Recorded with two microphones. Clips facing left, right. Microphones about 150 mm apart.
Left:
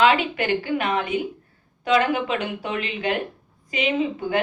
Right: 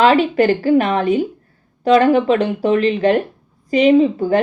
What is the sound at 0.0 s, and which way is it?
A woman's voice, 40° right (ahead or behind).